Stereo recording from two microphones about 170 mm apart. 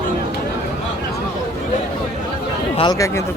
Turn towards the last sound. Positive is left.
turn(degrees=20)  # may be behind; listen again after turning